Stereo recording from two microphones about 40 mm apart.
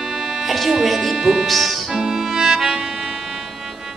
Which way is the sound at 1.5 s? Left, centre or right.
Centre.